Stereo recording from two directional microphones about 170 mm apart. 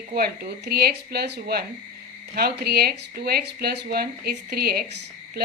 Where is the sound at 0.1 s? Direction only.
60° right (ahead or behind).